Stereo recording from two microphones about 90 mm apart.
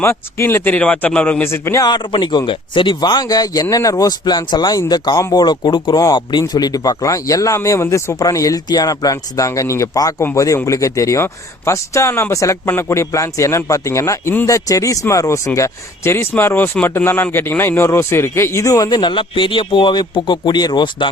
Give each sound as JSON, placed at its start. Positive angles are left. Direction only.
{"t": 0.0, "sound": "a man's voice", "side_deg": 30}
{"t": 1.5, "sound": "a man's voice", "side_deg": 30}
{"t": 1.8, "sound": "a man's voice", "side_deg": 55}